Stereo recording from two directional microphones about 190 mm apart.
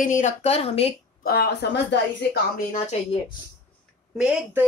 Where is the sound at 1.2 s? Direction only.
55° left (ahead or behind).